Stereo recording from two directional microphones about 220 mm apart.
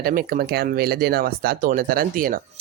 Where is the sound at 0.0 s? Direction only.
40° right (ahead or behind).